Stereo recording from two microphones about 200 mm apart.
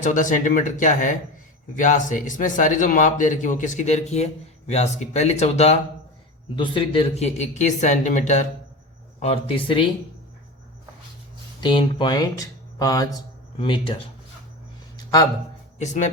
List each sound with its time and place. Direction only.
0.0 s speech: 40° left (ahead or behind)
11.6 s speech: 25° left (ahead or behind)
15.8 s speech: 35° left (ahead or behind)